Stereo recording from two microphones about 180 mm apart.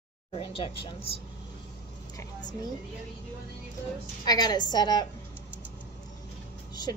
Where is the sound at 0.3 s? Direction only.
30° left (ahead or behind).